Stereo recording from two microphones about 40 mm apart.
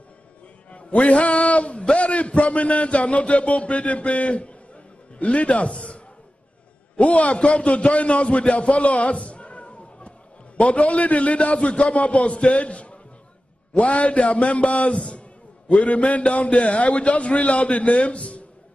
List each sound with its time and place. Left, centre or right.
0.7 s a man's voice: left
7.0 s a man's voice: left
15.7 s a man's voice: left